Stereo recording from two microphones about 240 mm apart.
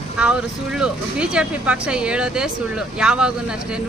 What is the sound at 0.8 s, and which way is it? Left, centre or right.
A woman's voice, centre.